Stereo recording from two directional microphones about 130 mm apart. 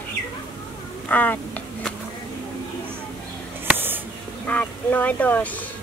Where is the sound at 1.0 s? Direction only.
15° left (ahead or behind).